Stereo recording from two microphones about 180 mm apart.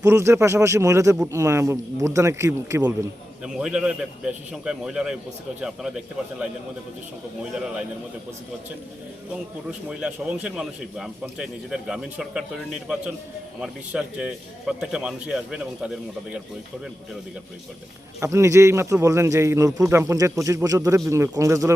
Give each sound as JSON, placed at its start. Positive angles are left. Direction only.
{"t": 0.0, "sound": "a man's voice", "side_deg": -15}
{"t": 1.1, "sound": "a man's voice", "side_deg": -5}
{"t": 1.4, "sound": "a man's voice", "side_deg": -15}
{"t": 9.9, "sound": "a man's voice", "side_deg": -5}
{"t": 18.2, "sound": "a man's voice", "side_deg": -15}